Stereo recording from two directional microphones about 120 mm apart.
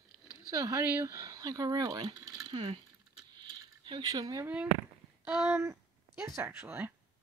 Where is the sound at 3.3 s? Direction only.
40° right (ahead or behind).